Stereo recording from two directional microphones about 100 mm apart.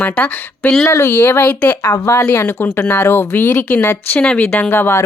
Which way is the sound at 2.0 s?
25° left (ahead or behind).